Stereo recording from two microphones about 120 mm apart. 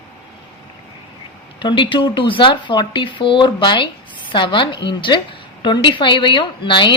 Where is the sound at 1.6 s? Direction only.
45° left (ahead or behind).